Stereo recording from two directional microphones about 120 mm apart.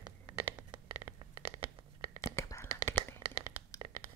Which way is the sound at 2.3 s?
25° left (ahead or behind).